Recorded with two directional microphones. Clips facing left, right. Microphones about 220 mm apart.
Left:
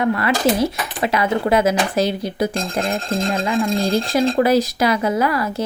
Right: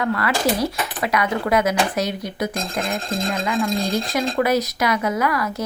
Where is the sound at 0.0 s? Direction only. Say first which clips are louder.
Left 3 dB; 25° left (ahead or behind).